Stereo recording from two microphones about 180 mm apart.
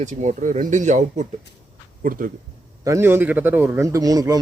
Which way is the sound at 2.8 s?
15° right (ahead or behind).